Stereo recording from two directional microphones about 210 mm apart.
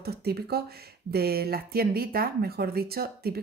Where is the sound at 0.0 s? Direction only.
50° right (ahead or behind).